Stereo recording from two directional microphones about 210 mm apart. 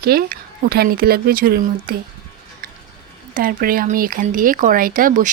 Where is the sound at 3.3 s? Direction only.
45° right (ahead or behind).